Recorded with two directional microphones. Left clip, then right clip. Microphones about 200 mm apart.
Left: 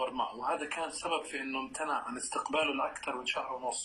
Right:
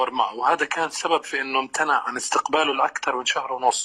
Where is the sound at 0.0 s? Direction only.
45° right (ahead or behind).